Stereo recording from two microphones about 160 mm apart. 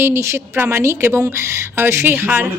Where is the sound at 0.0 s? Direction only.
15° right (ahead or behind).